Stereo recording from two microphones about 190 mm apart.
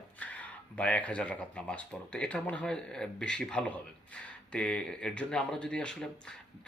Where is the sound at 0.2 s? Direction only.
5° left (ahead or behind).